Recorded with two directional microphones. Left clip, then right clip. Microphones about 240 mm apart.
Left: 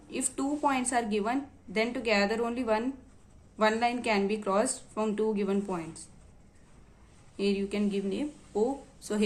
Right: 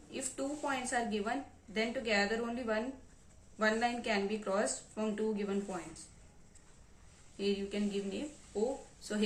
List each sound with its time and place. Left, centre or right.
0.1 s a woman's voice: left
7.3 s a woman's voice: left